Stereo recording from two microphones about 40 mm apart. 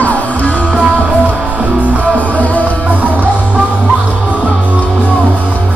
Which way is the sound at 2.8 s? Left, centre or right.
Right.